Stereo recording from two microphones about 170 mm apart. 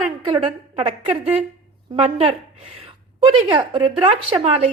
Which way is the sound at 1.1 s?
10° right (ahead or behind).